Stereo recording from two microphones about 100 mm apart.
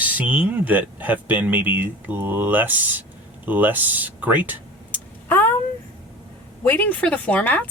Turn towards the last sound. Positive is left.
turn(degrees=15)  # may be behind; listen again after turning